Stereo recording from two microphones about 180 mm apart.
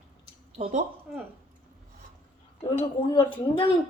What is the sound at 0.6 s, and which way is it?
Speech, 40° right (ahead or behind).